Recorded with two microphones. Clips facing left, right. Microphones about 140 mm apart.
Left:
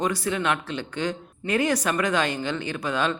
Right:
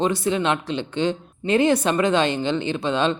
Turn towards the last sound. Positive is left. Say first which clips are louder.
# right 4 dB
turn(degrees=-25)  # may be behind; listen again after turning